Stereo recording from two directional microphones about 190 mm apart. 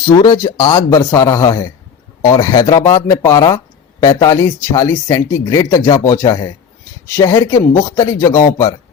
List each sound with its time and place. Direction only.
0.0 s speech: 20° left (ahead or behind)